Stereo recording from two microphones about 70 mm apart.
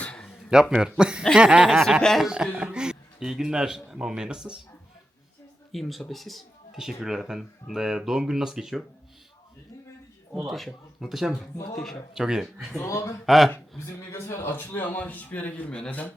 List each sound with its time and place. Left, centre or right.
0.0 s a sound: centre
0.3 s a man's voice: centre
2.0 s speech: centre
2.2 s a man's voice: centre
5.7 s speech: centre
10.3 s a man's voice: centre
12.8 s speech: left
13.2 s speech: centre
13.7 s speech: left
14.4 s a man's voice: left